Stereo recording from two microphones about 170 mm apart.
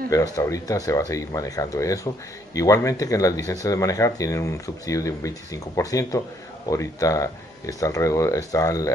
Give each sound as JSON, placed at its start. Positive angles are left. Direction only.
{"t": 0.1, "sound": "speech", "side_deg": 20}